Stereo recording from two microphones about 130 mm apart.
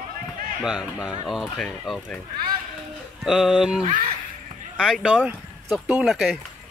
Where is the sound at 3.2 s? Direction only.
5° right (ahead or behind).